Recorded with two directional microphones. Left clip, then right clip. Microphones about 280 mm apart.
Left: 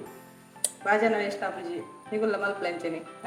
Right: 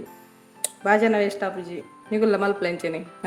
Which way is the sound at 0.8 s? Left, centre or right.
Right.